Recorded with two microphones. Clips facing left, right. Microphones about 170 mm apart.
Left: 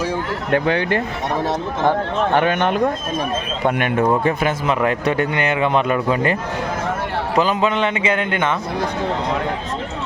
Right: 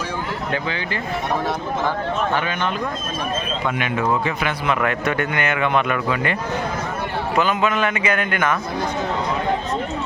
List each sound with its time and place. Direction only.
0.5 s speech: 60° left (ahead or behind)
4.2 s speech: 45° left (ahead or behind)
4.8 s speech: 30° left (ahead or behind)
7.3 s a man's voice: 30° left (ahead or behind)